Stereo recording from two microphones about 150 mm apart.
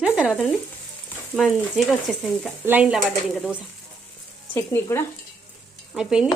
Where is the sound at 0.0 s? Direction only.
10° right (ahead or behind).